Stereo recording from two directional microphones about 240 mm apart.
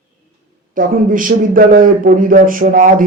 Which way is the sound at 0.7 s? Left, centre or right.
Right.